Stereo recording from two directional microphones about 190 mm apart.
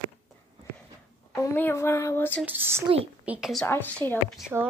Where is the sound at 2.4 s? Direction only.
10° right (ahead or behind).